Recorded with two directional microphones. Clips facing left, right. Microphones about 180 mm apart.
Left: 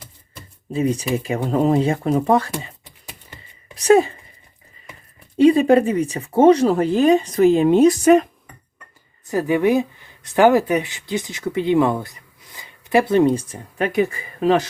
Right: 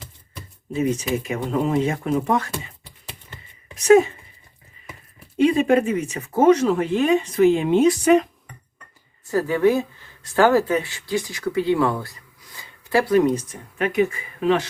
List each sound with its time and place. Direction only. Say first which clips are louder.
0.7 s speech: left 2 dB; 35° left (ahead or behind)
3.8 s speech: even; 35° left (ahead or behind)
5.4 s speech: left 4 dB; 35° left (ahead or behind)
9.2 s speech: left 1 dB; 15° left (ahead or behind); by 14.6 s 40° left (ahead or behind)